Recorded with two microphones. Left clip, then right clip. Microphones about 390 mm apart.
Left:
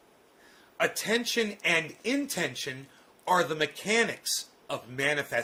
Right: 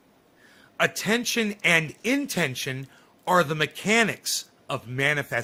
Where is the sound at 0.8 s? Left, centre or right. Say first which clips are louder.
Right 4 dB; right.